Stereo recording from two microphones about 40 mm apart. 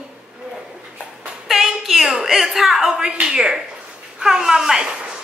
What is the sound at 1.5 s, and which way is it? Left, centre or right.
A woman's voice, centre.